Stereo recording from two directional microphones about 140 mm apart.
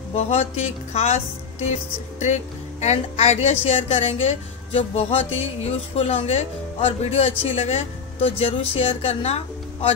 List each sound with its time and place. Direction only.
0.1 s speech: 50° left (ahead or behind)